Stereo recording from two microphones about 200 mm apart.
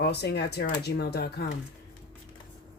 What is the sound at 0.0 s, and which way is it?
Speech, 55° left (ahead or behind).